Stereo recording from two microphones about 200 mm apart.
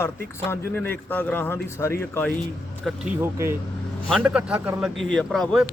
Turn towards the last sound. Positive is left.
turn(degrees=0)  # may be behind; listen again after turning